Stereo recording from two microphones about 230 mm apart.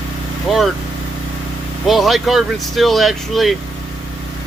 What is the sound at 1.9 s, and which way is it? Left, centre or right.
Speech, centre.